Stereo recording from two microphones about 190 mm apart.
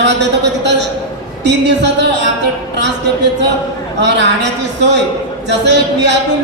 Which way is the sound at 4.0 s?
65° right (ahead or behind).